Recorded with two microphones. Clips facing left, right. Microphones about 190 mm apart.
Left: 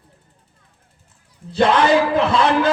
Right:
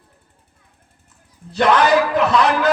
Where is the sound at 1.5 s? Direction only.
25° left (ahead or behind).